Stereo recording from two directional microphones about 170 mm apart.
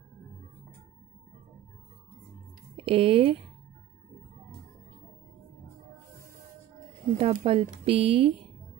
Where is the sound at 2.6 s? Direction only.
35° right (ahead or behind).